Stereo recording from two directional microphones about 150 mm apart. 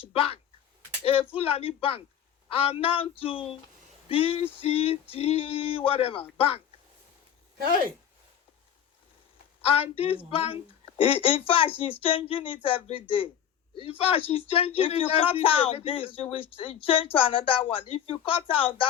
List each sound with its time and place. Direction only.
0.0 s speech: 40° left (ahead or behind)
9.6 s speech: 40° left (ahead or behind)